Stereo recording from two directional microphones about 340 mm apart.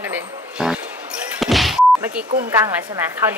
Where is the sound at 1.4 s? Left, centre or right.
Centre.